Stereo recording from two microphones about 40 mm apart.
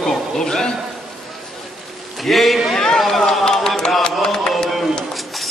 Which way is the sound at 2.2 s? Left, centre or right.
Centre.